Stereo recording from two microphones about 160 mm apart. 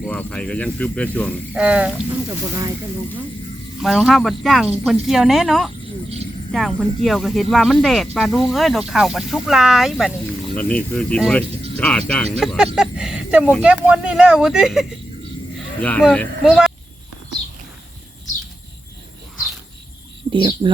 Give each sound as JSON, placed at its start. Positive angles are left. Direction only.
{"t": 0.0, "sound": "speech", "side_deg": 5}
{"t": 1.5, "sound": "frog", "side_deg": -5}
{"t": 3.8, "sound": "speech", "side_deg": 0}
{"t": 10.5, "sound": "speech", "side_deg": 10}
{"t": 12.7, "sound": "a sound", "side_deg": -5}
{"t": 13.6, "sound": "speech", "side_deg": -10}
{"t": 15.5, "sound": "speech", "side_deg": 5}
{"t": 20.3, "sound": "speech", "side_deg": -30}